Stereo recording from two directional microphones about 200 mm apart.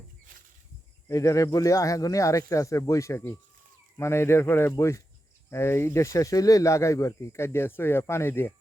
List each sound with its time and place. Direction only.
1.0 s speech: 15° left (ahead or behind)